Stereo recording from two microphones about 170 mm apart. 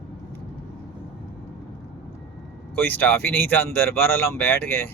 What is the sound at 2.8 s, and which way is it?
Speech, 10° left (ahead or behind).